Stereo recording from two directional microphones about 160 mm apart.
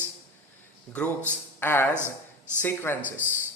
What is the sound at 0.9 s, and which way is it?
Speech, 10° left (ahead or behind).